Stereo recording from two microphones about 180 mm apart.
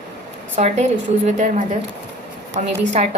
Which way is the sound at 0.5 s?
40° right (ahead or behind).